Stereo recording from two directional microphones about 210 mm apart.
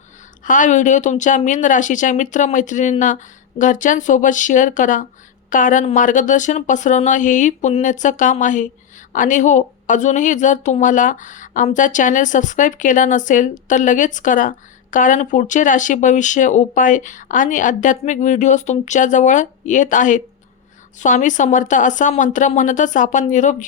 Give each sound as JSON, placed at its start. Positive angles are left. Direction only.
{"t": 0.4, "sound": "a woman's voice", "side_deg": 40}